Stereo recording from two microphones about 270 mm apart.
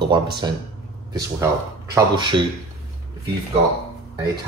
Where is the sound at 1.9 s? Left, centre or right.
Centre.